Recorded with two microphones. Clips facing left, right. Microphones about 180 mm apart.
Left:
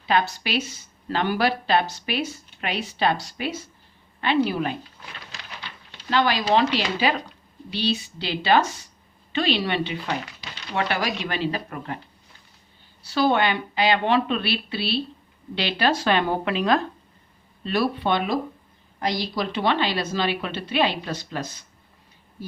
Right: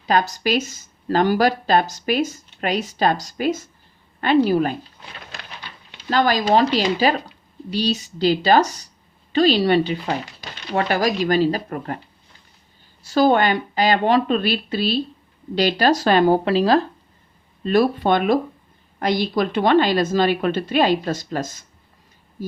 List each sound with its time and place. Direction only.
0.0 s speech: 40° right (ahead or behind)
5.2 s a sound: 55° right (ahead or behind)
6.1 s speech: 40° right (ahead or behind)
13.0 s speech: 45° right (ahead or behind)
17.6 s speech: 45° right (ahead or behind)